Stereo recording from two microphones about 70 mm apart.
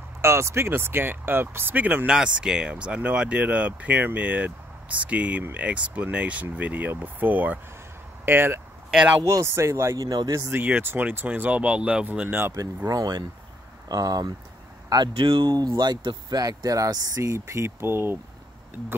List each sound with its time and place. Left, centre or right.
0.2 s speech: right
2.0 s speech: centre; by 8.5 s right
9.2 s speech: right
9.9 s speech: right
10.4 s speech: right
12.5 s speech: right
15.2 s speech: right
15.5 s speech: right